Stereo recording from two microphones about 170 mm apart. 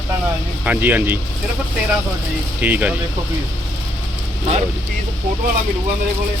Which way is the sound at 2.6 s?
10° right (ahead or behind).